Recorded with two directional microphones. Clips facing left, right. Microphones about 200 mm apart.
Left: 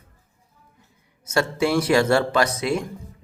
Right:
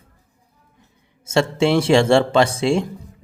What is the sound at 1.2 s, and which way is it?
Speech, 25° right (ahead or behind).